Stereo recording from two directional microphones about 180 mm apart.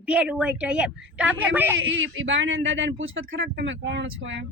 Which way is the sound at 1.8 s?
90° right.